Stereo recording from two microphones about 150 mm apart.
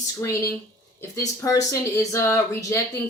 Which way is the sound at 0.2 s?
20° left (ahead or behind).